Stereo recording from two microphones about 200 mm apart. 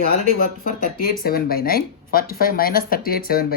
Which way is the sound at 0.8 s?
50° left (ahead or behind).